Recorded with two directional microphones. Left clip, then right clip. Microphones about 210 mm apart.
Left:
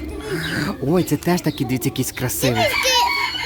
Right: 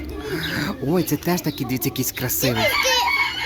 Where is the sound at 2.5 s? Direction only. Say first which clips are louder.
Left 2 dB; 35° left (ahead or behind).